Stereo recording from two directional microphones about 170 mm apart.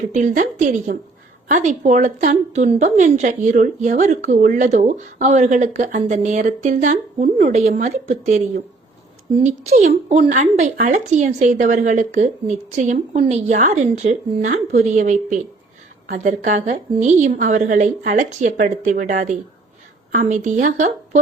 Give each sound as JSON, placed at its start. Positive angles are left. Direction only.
{"t": 0.1, "sound": "a woman's voice", "side_deg": -45}
{"t": 9.4, "sound": "a woman's voice", "side_deg": -45}